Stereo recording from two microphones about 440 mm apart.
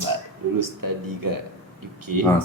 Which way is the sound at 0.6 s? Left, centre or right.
Right.